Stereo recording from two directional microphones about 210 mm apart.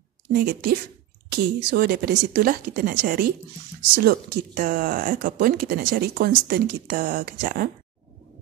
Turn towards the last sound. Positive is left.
turn(degrees=-45)  # may be behind; listen again after turning